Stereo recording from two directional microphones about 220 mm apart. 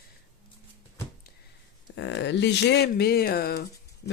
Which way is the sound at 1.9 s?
50° left (ahead or behind).